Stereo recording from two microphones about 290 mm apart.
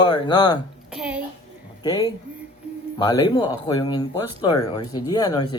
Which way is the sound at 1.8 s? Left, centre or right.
Centre.